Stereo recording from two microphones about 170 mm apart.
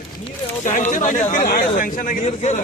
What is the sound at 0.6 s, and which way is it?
Speech, 45° left (ahead or behind).